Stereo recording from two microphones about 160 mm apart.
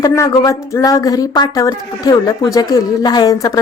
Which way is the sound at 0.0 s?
20° left (ahead or behind).